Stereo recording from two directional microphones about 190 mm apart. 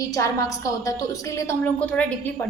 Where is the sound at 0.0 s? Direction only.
15° left (ahead or behind).